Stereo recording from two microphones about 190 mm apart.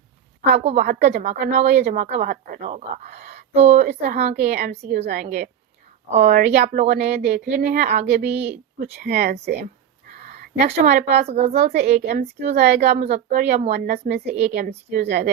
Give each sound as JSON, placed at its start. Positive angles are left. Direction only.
{"t": 0.4, "sound": "speech", "side_deg": -35}
{"t": 8.8, "sound": "speech", "side_deg": -55}
{"t": 10.2, "sound": "speech", "side_deg": -35}
{"t": 13.7, "sound": "speech", "side_deg": -50}